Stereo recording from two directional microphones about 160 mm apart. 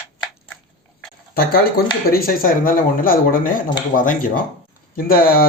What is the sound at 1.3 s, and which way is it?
Speech, 75° left (ahead or behind).